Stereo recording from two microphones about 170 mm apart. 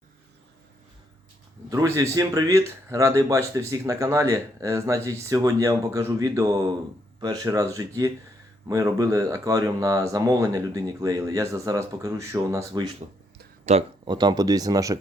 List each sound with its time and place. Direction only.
1.7 s speech: 20° right (ahead or behind)
13.7 s speech: 35° right (ahead or behind)